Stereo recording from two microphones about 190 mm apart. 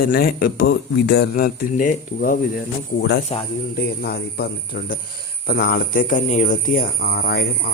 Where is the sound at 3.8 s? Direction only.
55° left (ahead or behind).